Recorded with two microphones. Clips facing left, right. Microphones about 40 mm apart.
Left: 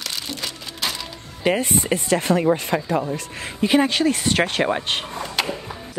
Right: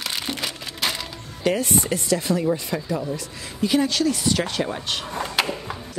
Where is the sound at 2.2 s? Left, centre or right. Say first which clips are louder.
Left 4 dB; left.